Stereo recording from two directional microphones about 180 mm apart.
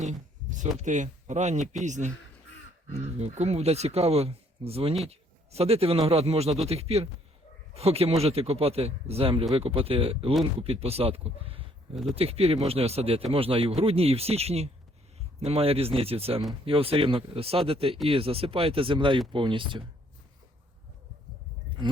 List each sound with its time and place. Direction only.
0.0 s a sound: 40° right (ahead or behind)
0.8 s speech: 40° right (ahead or behind); by 19.8 s 25° right (ahead or behind)
21.8 s speech: 25° right (ahead or behind)